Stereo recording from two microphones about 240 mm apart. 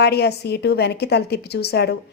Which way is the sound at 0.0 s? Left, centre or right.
Left.